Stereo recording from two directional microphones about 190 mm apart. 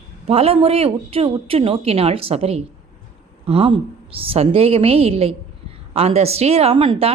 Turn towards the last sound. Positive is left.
turn(degrees=-30)  # may be behind; listen again after turning